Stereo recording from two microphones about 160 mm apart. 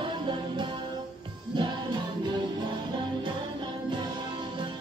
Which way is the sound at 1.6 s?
30° right (ahead or behind).